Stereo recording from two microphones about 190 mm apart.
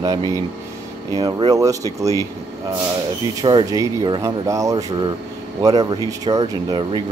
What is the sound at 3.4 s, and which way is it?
Speech, 20° right (ahead or behind).